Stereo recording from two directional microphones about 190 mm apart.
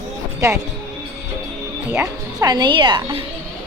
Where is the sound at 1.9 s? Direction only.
15° right (ahead or behind).